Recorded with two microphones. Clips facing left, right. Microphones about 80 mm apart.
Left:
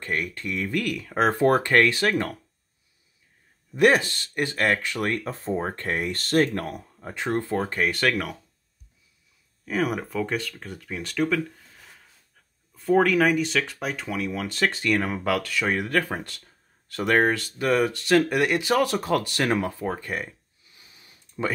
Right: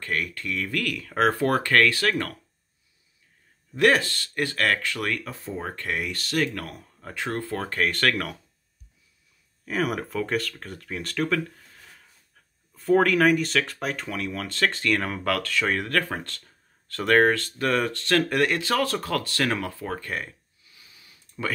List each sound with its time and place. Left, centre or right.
0.0 s speech: left
3.7 s speech: left
6.7 s speech: centre
9.7 s speech: centre
20.6 s a sound: left